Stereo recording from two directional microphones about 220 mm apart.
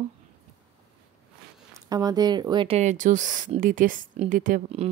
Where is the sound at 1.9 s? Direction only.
20° right (ahead or behind).